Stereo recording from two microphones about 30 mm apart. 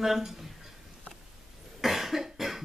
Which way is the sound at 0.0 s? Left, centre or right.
Centre.